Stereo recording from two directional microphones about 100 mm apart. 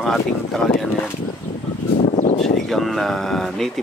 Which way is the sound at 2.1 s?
90° left.